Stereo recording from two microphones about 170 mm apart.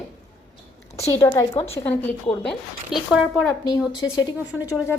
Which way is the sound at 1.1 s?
20° left (ahead or behind).